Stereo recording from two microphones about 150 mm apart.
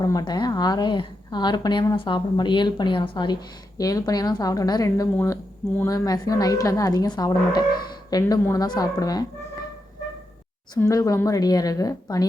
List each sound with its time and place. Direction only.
0.0 s a woman's voice: 25° left (ahead or behind)
10.8 s a woman's voice: 20° left (ahead or behind)